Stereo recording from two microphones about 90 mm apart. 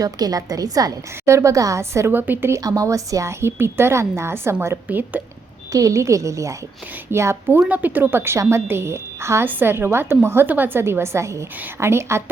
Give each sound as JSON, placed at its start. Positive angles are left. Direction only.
{"t": 0.0, "sound": "a woman's voice", "side_deg": -45}
{"t": 2.6, "sound": "a woman's voice", "side_deg": -40}
{"t": 4.9, "sound": "a woman's voice", "side_deg": -20}
{"t": 5.7, "sound": "a woman's voice", "side_deg": -35}